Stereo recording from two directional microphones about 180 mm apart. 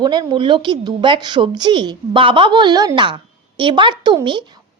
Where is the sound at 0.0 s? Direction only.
25° right (ahead or behind).